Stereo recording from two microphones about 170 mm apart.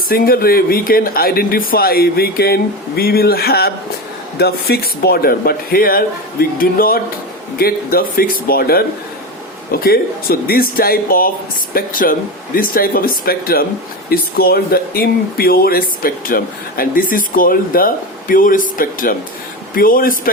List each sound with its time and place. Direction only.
0.1 s speech: 60° left (ahead or behind)